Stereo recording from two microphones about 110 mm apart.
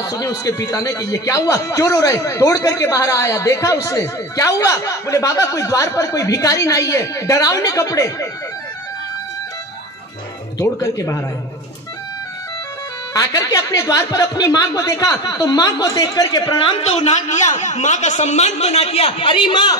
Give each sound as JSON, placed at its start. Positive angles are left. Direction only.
{"t": 0.0, "sound": "speech", "side_deg": 30}
{"t": 10.6, "sound": "speech", "side_deg": 30}
{"t": 13.1, "sound": "speech", "side_deg": 35}
{"t": 16.6, "sound": "a man's voice", "side_deg": 65}